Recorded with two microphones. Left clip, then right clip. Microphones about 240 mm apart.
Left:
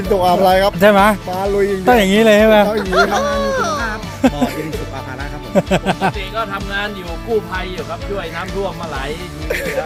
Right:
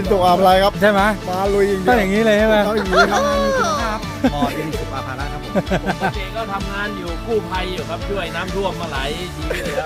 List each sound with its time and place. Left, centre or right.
0.1 s speech: centre
0.8 s speech: left
1.3 s speech: centre
1.8 s speech: left
2.6 s speech: centre
5.5 s speech: left